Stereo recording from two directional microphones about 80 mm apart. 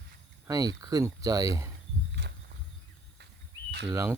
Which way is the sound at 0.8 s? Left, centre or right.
Right.